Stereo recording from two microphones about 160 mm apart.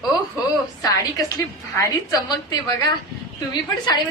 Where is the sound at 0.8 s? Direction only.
25° left (ahead or behind).